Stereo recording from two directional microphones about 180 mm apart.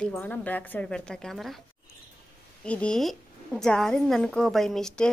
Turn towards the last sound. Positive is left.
turn(degrees=5)  # may be behind; listen again after turning